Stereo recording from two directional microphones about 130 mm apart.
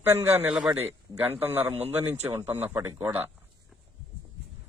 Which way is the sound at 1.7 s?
50° right (ahead or behind).